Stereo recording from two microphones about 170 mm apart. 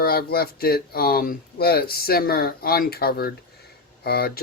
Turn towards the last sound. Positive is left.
turn(degrees=65)  # may be behind; listen again after turning